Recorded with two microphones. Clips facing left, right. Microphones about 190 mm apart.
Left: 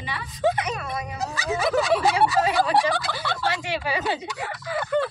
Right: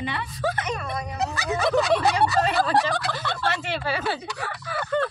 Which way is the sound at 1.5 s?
5° left (ahead or behind).